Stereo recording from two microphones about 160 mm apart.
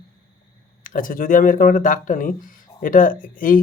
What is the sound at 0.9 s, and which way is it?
Speech, 55° left (ahead or behind).